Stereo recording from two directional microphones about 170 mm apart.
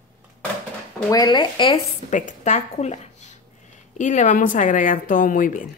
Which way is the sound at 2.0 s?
45° left (ahead or behind).